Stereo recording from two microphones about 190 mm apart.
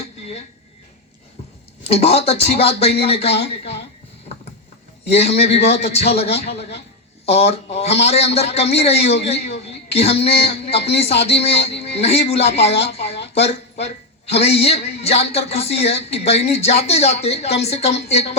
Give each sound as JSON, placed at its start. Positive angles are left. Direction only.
{"t": 1.9, "sound": "a man's voice", "side_deg": 30}
{"t": 5.1, "sound": "a man's voice", "side_deg": 35}